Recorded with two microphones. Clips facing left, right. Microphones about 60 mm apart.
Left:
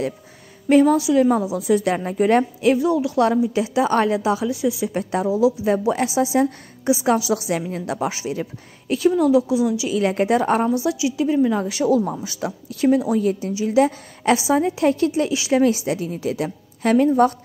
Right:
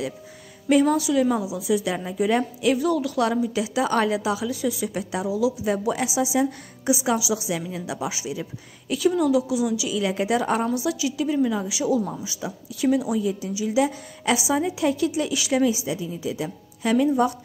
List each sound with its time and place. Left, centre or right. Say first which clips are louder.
0.8 s a woman's voice: left 4 dB; left
1.4 s a woman's voice: left 5 dB; left
4.5 s a woman's voice: left 4 dB; left
4.9 s a woman's voice: left 5 dB; left
11.5 s a woman's voice: left 5 dB; left
13.2 s a woman's voice: left 5 dB; left
13.5 s a woman's voice: left 5 dB; left
15.6 s a woman's voice: left 4 dB; left